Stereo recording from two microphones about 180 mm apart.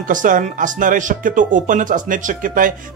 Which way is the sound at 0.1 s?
45° right (ahead or behind).